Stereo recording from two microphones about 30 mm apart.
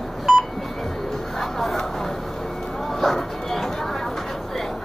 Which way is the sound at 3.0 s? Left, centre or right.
Centre.